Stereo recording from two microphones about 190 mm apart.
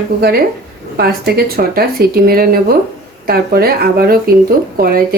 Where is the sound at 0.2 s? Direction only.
55° right (ahead or behind).